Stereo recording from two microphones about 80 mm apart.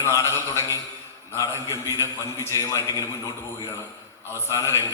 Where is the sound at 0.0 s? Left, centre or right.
Left.